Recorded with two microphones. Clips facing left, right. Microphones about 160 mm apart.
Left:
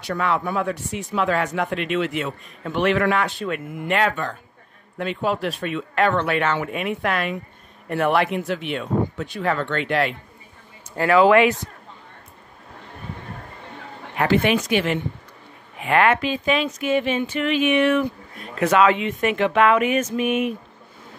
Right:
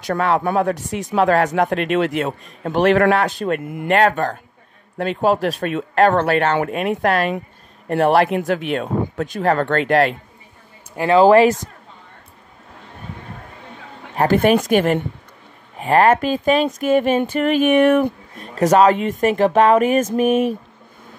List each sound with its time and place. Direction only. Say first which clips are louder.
0.0 s speech: right 5 dB; 45° right (ahead or behind)
11.0 s speech: right 4 dB; 30° right (ahead or behind)
14.1 s speech: right 4 dB; 45° right (ahead or behind)
18.5 s speech: right 4 dB; 40° right (ahead or behind)